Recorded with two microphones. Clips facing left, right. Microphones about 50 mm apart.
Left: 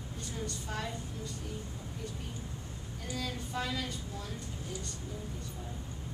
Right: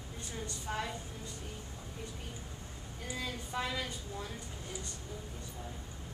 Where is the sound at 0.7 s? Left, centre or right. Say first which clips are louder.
Right 4 dB; right.